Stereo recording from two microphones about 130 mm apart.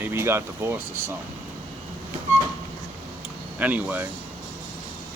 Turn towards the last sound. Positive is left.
turn(degrees=-15)  # may be behind; listen again after turning